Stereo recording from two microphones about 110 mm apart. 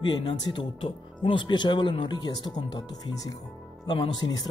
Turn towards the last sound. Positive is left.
turn(degrees=40)  # may be behind; listen again after turning